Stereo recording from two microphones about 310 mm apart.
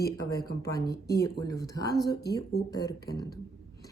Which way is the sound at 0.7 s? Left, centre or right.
Centre.